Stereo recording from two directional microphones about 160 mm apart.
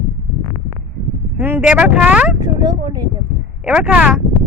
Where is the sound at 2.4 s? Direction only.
25° right (ahead or behind).